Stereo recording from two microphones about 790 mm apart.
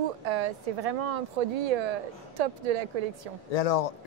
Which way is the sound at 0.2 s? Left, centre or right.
Right.